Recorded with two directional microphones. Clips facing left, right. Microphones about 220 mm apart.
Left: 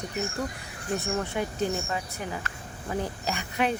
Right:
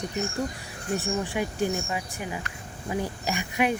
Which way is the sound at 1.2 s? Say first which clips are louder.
Right 1 dB; 15° right (ahead or behind).